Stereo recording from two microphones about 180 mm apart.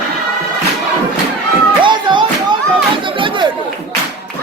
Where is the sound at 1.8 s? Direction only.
25° right (ahead or behind).